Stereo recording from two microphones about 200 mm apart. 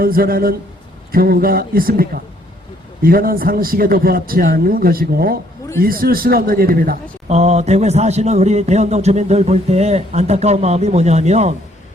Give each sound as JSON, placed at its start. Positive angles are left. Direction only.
{"t": 0.0, "sound": "a man's voice", "side_deg": -50}
{"t": 7.3, "sound": "a man's voice", "side_deg": -35}